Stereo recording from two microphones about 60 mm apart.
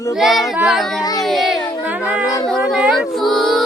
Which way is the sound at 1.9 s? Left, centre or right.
Right.